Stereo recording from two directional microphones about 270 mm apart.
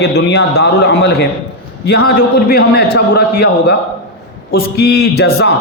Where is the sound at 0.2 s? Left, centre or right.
Left.